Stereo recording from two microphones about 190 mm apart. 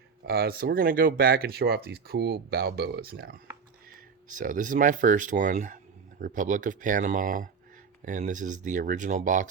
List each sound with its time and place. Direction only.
0.3 s speech: 55° right (ahead or behind)